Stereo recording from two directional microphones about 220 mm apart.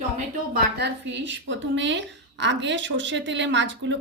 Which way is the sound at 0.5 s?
50° right (ahead or behind).